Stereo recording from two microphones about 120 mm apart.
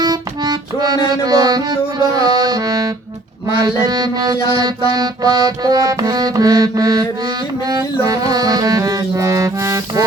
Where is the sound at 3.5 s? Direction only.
35° right (ahead or behind).